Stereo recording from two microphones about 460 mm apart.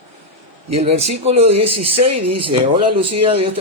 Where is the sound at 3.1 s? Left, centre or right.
Centre.